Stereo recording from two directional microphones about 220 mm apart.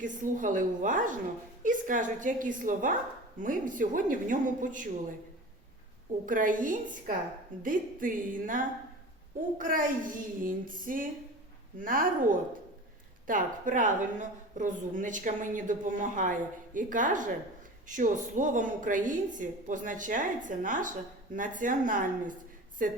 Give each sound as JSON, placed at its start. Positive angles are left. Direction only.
{"t": 0.0, "sound": "a woman's voice", "side_deg": -35}
{"t": 6.2, "sound": "a woman's voice", "side_deg": -35}